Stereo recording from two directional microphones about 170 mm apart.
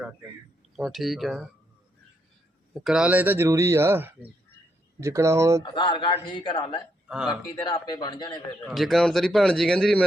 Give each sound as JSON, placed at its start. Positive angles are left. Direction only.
{"t": 0.8, "sound": "a man's voice", "side_deg": 0}
{"t": 2.7, "sound": "speech", "side_deg": -5}
{"t": 5.6, "sound": "a man's voice", "side_deg": 30}
{"t": 8.6, "sound": "a man's voice", "side_deg": 0}